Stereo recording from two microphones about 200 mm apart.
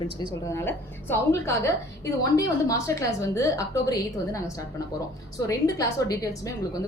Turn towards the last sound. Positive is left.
turn(degrees=15)  # may be behind; listen again after turning